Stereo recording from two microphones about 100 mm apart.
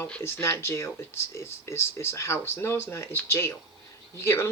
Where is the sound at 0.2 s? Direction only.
25° left (ahead or behind).